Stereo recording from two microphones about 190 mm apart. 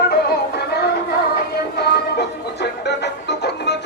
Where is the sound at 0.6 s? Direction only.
55° left (ahead or behind).